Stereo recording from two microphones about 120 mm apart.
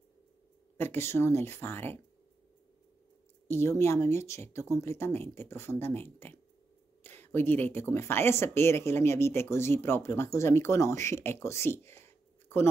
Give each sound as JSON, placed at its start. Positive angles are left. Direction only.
{"t": 0.7, "sound": "speech", "side_deg": 20}
{"t": 3.4, "sound": "speech", "side_deg": 20}